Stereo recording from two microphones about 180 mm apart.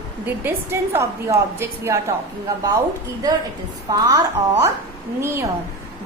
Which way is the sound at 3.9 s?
15° right (ahead or behind).